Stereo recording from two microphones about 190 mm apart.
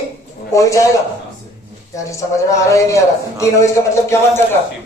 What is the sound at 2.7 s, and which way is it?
A man's voice, 15° left (ahead or behind).